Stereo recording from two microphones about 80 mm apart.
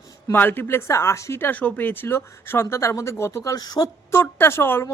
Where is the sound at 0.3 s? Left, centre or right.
Left.